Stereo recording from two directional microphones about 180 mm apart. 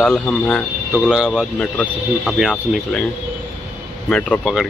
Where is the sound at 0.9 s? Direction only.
5° right (ahead or behind).